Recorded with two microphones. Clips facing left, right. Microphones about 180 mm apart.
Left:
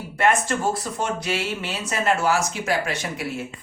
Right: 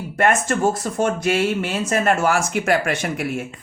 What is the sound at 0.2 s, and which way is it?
Speech, 50° right (ahead or behind).